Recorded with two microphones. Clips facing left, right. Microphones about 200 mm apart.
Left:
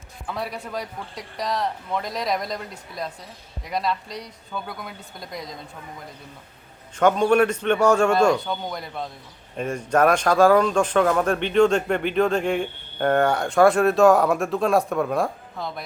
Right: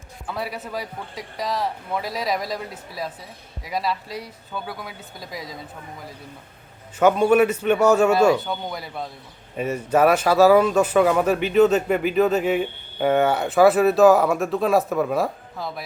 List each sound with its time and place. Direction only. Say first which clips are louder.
0.3 s speech: right 1 dB; 5° right (ahead or behind)
7.0 s a man's voice: right 2 dB; 5° right (ahead or behind)